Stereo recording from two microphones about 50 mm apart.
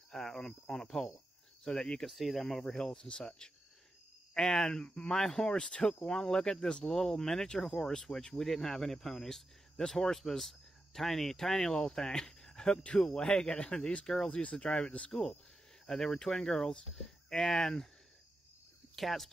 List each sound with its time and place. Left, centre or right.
0.1 s a sound: centre
0.8 s speech: centre
2.0 s speech: centre
4.8 s speech: left
5.1 s speech: centre
15.0 s speech: centre
18.9 s speech: centre